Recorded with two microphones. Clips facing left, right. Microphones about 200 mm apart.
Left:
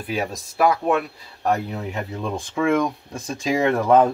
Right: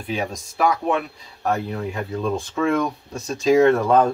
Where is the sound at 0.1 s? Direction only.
5° left (ahead or behind).